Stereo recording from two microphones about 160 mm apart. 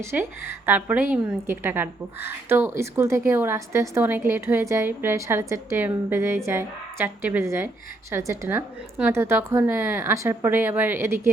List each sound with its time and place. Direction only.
0.0 s a woman's voice: 15° right (ahead or behind)